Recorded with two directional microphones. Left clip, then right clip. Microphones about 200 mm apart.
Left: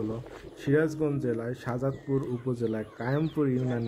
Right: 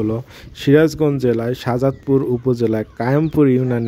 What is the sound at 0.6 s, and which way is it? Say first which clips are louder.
A man's voice: right 13 dB; 45° right (ahead or behind).